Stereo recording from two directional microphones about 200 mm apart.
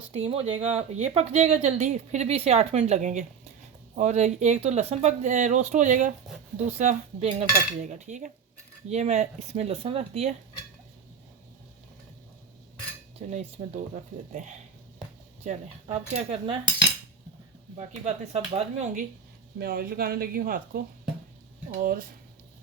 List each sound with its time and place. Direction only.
0.1 s speech: 30° right (ahead or behind)
13.6 s speech: 30° right (ahead or behind)
17.7 s speech: 30° right (ahead or behind)
19.5 s speech: 50° right (ahead or behind)